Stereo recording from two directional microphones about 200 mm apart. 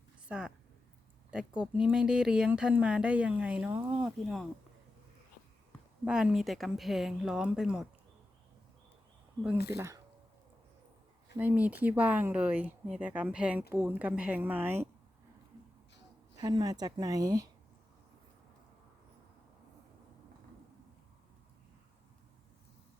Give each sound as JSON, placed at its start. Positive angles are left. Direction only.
{"t": 0.3, "sound": "a woman's voice", "side_deg": -5}
{"t": 6.1, "sound": "speech", "side_deg": -5}
{"t": 9.6, "sound": "speech", "side_deg": -15}
{"t": 11.3, "sound": "speech", "side_deg": -10}
{"t": 16.4, "sound": "a woman's voice", "side_deg": -20}